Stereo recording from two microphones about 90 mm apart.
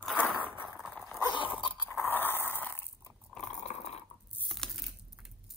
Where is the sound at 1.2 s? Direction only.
60° left (ahead or behind).